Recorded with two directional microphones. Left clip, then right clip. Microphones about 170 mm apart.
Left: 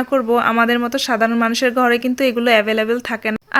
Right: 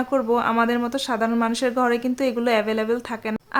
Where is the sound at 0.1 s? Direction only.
15° left (ahead or behind).